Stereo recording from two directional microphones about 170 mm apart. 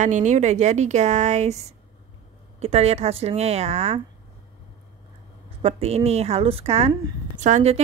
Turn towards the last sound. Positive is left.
turn(degrees=-45)  # may be behind; listen again after turning